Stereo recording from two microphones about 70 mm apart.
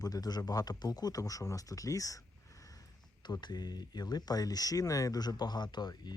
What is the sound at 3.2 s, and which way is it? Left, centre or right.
Speech, left.